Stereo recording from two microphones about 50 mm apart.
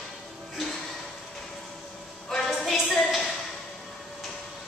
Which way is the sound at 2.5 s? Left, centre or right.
Centre.